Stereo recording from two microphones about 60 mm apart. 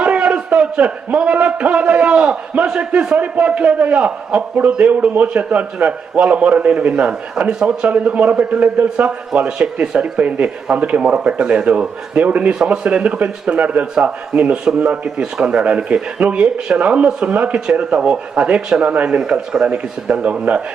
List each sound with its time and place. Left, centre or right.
0.0 s a man's voice: centre
17.3 s a man's voice: right
17.7 s a man's voice: centre
19.2 s speech: centre
19.6 s a man's voice: right